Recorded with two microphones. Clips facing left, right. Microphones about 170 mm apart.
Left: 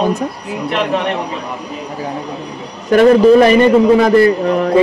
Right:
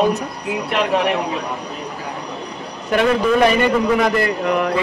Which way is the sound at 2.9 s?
40° left (ahead or behind).